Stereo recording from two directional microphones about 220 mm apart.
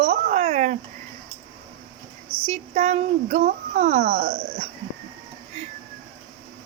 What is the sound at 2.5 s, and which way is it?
Speech, 30° right (ahead or behind).